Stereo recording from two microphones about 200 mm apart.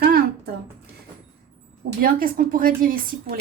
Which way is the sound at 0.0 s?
50° right (ahead or behind).